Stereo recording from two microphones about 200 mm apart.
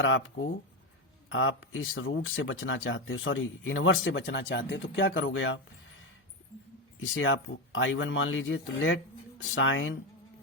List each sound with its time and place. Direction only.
1.3 s speech: 75° left (ahead or behind)
7.0 s speech: 80° left